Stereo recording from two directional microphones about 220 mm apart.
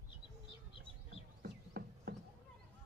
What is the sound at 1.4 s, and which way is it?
Music, 45° right (ahead or behind).